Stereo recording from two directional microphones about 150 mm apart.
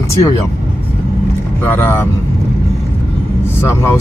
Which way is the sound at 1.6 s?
15° left (ahead or behind).